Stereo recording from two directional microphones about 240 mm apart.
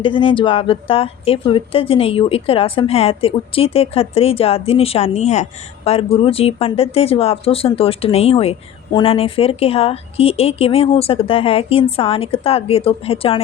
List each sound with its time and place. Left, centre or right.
0.0 s a woman's voice: left